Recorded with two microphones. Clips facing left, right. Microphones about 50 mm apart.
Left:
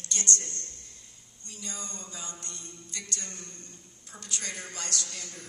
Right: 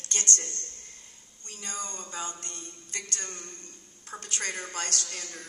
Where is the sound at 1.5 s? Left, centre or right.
Right.